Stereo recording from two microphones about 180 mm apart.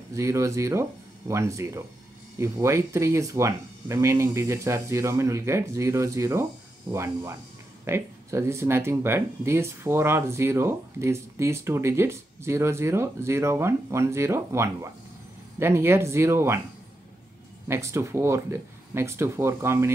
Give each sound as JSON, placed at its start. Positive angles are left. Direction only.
{"t": 0.1, "sound": "speech", "side_deg": -15}
{"t": 17.6, "sound": "speech", "side_deg": -15}